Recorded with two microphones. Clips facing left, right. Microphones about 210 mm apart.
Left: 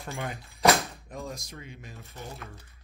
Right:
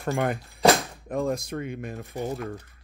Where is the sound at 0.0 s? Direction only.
70° right (ahead or behind).